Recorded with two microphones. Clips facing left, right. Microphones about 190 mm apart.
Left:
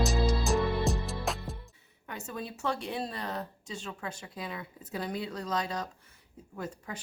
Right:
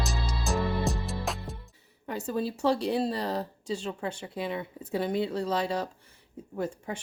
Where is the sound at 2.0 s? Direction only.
35° right (ahead or behind).